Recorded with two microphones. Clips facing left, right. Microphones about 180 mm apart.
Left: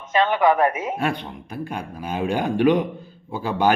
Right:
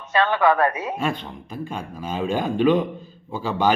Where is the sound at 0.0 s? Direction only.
15° left (ahead or behind).